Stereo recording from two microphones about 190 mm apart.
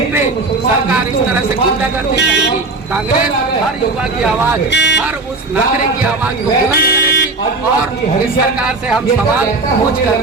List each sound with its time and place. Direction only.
4.7 s speech: 65° left (ahead or behind)
6.7 s music: 55° left (ahead or behind)